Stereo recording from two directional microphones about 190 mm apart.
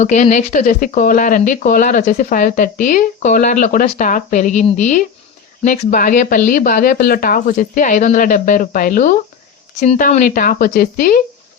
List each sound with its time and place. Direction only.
0.0 s speech: 40° left (ahead or behind)
9.8 s speech: 35° left (ahead or behind)